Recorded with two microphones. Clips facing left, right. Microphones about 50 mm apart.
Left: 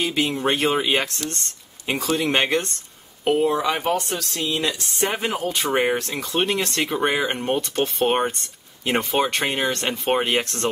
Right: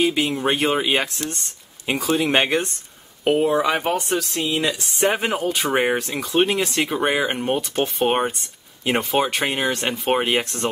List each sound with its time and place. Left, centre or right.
0.0 s speech: centre